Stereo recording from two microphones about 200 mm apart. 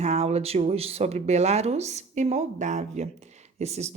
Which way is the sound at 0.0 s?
35° right (ahead or behind).